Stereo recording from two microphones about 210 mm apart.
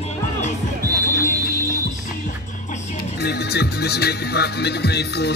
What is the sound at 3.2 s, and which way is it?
Speech, 50° left (ahead or behind).